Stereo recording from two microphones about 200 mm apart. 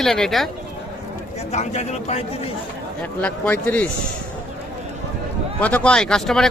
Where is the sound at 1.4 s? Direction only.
35° left (ahead or behind).